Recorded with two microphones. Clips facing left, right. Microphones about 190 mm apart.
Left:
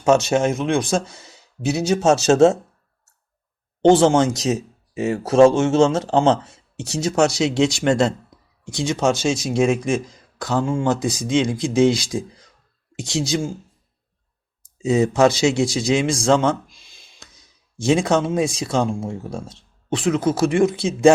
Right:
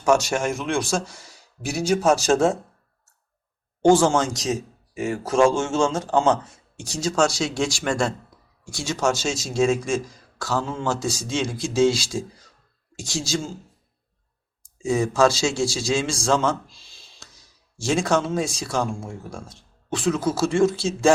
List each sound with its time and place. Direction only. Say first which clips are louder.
0.0 s a man's voice: left 4 dB; 20° left (ahead or behind)
3.8 s a man's voice: left 3 dB; 20° left (ahead or behind)
14.8 s a man's voice: left 3 dB; 20° left (ahead or behind)
17.7 s a man's voice: left 4 dB; 20° left (ahead or behind)